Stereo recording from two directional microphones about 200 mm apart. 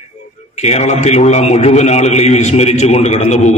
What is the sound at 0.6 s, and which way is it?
A man's voice, 35° left (ahead or behind).